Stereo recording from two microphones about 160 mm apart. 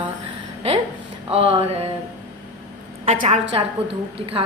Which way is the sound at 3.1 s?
45° right (ahead or behind).